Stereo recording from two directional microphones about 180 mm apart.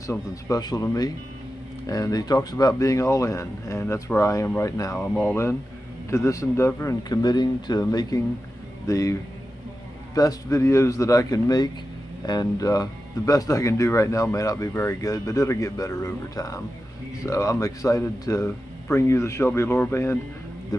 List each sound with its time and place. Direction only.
0.1 s speech: 15° left (ahead or behind)
10.2 s speech: 20° left (ahead or behind)